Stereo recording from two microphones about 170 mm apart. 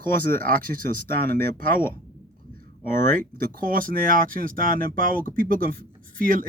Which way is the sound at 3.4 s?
55° right (ahead or behind).